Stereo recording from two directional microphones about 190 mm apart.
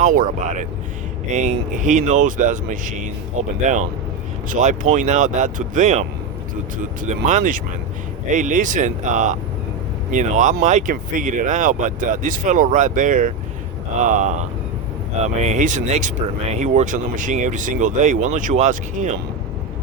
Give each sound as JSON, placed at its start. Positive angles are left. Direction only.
{"t": 0.0, "sound": "speech", "side_deg": -45}
{"t": 7.3, "sound": "speech", "side_deg": -40}